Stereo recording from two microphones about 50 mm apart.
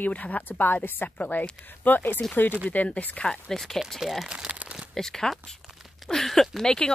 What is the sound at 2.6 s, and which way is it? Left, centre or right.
Speech, left.